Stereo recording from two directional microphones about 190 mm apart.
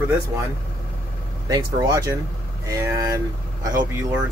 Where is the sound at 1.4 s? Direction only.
20° right (ahead or behind).